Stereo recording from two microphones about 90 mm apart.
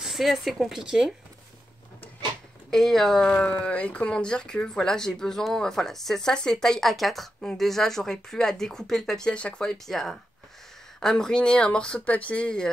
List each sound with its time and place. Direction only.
0.0 s speech: centre (ahead or behind)
2.7 s speech: centre (ahead or behind)